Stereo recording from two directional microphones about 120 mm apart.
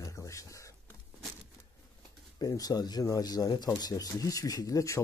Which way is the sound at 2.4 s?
30° left (ahead or behind).